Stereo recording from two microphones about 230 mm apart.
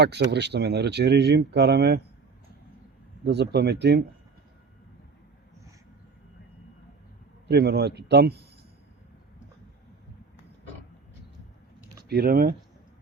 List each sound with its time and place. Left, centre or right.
0.0 s speech: right
3.2 s speech: right
7.4 s speech: right
12.0 s speech: right